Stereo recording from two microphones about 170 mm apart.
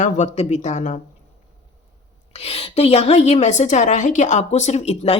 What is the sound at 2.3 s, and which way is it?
A woman's voice, 35° left (ahead or behind).